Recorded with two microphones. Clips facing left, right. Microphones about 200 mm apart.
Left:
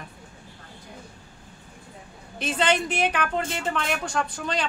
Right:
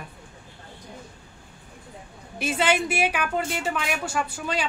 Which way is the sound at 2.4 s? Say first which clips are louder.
Even; 10° right (ahead or behind).